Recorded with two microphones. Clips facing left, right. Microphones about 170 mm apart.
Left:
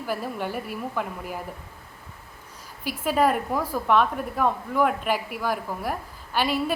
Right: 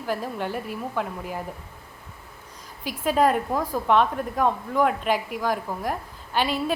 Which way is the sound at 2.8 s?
5° left (ahead or behind).